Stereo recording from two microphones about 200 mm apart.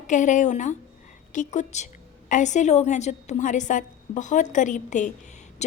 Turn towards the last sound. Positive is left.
turn(degrees=35)  # may be behind; listen again after turning